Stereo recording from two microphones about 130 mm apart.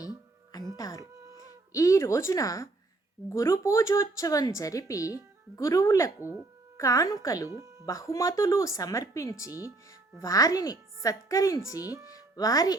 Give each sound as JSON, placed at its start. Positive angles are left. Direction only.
{"t": 0.8, "sound": "speech", "side_deg": 25}
{"t": 6.1, "sound": "speech", "side_deg": -15}
{"t": 6.7, "sound": "speech", "side_deg": 25}
{"t": 7.5, "sound": "speech", "side_deg": -25}
{"t": 7.9, "sound": "speech", "side_deg": 25}
{"t": 9.5, "sound": "speech", "side_deg": -15}
{"t": 10.2, "sound": "speech", "side_deg": 25}